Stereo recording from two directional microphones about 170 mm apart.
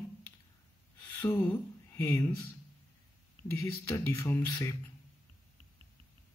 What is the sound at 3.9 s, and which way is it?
Speech, 15° left (ahead or behind).